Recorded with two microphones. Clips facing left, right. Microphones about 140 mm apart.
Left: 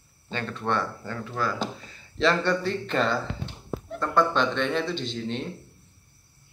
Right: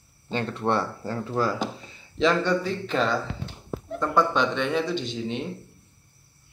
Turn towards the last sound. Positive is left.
turn(degrees=-10)  # may be behind; listen again after turning